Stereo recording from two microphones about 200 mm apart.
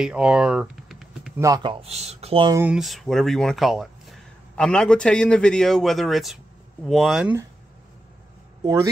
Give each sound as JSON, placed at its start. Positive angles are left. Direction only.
{"t": 0.0, "sound": "typing", "side_deg": -5}
{"t": 1.4, "sound": "speech", "side_deg": -20}
{"t": 2.5, "sound": "speech", "side_deg": -5}